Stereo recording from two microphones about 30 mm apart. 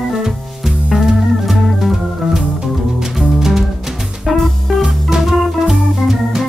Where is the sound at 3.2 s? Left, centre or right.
Centre.